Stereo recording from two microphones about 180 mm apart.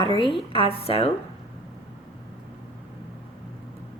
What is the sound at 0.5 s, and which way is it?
Speech, 30° left (ahead or behind).